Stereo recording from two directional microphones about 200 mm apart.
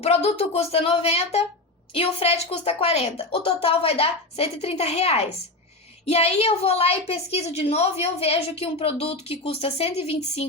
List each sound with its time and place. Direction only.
0.0 s a woman's voice: 30° left (ahead or behind)